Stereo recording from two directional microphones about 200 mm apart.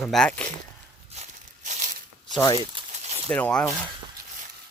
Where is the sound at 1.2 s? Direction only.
35° right (ahead or behind).